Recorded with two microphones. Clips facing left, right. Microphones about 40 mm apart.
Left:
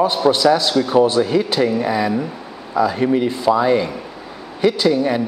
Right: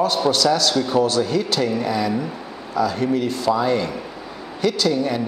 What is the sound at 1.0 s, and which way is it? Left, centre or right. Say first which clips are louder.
Speech: left 6 dB; centre.